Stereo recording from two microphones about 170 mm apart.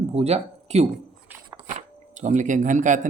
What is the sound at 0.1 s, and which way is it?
Speech, 40° right (ahead or behind).